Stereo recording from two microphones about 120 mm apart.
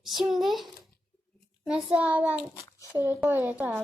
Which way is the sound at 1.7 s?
10° right (ahead or behind).